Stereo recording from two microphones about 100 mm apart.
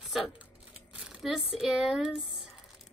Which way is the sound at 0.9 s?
10° right (ahead or behind).